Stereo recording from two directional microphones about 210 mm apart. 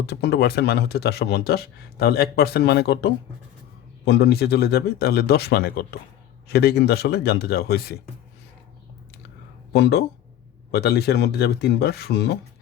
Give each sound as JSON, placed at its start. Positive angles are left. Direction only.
{"t": 0.0, "sound": "speech", "side_deg": 50}
{"t": 9.7, "sound": "speech", "side_deg": 50}